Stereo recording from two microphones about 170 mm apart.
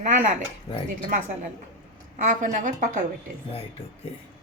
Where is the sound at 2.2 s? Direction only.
50° right (ahead or behind).